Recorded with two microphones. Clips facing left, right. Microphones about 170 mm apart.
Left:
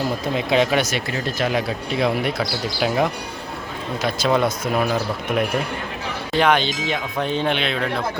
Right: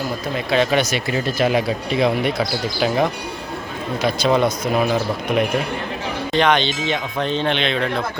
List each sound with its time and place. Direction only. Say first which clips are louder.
0.3 s speech: even; 15° left (ahead or behind)
0.7 s speech: right 2 dB; centre (ahead or behind)
6.3 s speech: even; 5° left (ahead or behind)